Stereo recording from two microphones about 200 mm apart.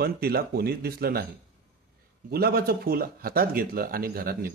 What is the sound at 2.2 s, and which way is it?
Speech, 50° right (ahead or behind).